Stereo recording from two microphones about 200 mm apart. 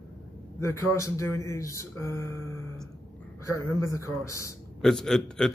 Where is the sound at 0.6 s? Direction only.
15° left (ahead or behind).